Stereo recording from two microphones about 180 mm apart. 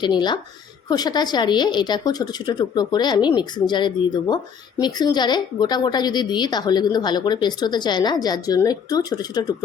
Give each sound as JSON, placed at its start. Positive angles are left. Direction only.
{"t": 0.0, "sound": "a woman's voice", "side_deg": 25}